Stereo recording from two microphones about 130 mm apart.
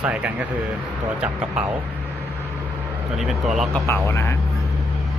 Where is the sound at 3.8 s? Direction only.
20° left (ahead or behind).